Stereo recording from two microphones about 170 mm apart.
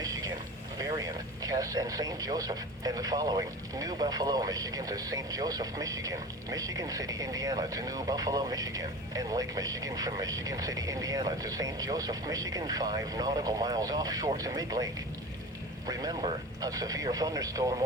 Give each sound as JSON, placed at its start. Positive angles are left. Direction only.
{"t": 0.0, "sound": "a sound", "side_deg": -20}
{"t": 0.8, "sound": "speech", "side_deg": -20}
{"t": 15.9, "sound": "speech", "side_deg": -20}